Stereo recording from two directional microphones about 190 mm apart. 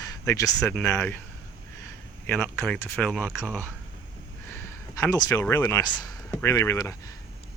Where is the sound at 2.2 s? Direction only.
10° left (ahead or behind).